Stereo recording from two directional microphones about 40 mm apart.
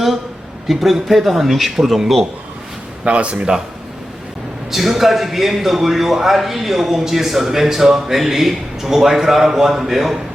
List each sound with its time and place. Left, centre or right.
0.7 s a man's voice: centre
3.0 s speech: right
4.7 s a man's voice: centre